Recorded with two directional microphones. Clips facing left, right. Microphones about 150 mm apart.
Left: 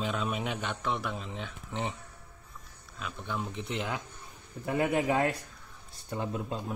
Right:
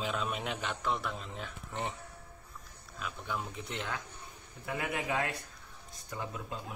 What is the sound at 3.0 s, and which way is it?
Speech, 5° right (ahead or behind).